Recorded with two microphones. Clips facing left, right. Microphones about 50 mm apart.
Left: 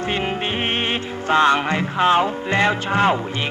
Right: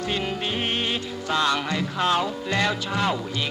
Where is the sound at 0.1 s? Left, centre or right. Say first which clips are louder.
Left 4 dB; left.